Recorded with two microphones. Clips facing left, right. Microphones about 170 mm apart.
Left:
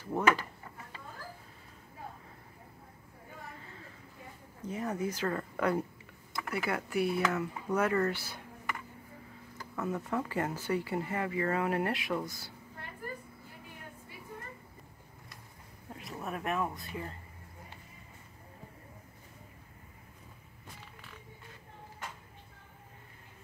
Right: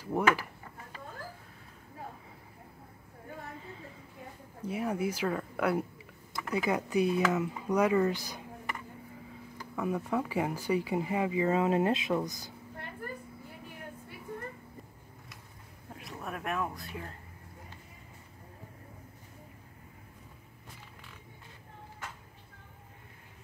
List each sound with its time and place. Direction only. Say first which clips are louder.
0.0 s speech: right 1 dB; 10° right (ahead or behind)
4.6 s speech: right 3 dB; 10° right (ahead or behind)
6.5 s speech: right 4 dB; 20° right (ahead or behind)
9.8 s speech: right 2 dB; 10° right (ahead or behind)
15.9 s speech: left 1 dB; centre (ahead or behind)